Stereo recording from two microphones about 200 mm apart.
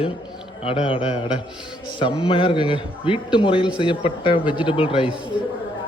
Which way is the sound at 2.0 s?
25° left (ahead or behind).